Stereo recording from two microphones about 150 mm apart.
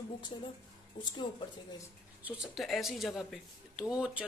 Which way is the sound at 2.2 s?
10° right (ahead or behind).